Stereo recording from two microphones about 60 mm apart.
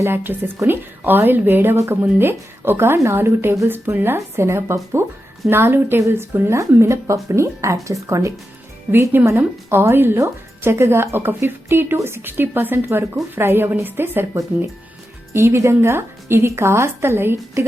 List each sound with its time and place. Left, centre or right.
0.0 s a woman's voice: right
6.5 s speech: right
8.9 s a woman's voice: right
15.3 s a woman's voice: right